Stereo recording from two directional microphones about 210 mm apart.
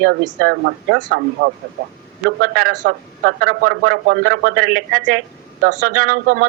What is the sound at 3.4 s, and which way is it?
Speech, 45° right (ahead or behind).